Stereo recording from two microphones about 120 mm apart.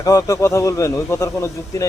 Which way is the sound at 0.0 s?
30° left (ahead or behind).